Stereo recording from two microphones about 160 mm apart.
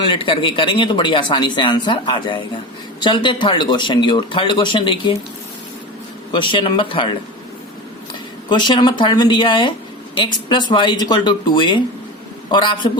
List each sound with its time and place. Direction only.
0.0 s speech: 35° left (ahead or behind)
6.5 s speech: 30° left (ahead or behind)
8.4 s speech: 30° left (ahead or behind)